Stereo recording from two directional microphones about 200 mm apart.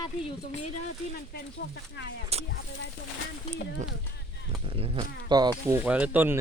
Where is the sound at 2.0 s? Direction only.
60° left (ahead or behind).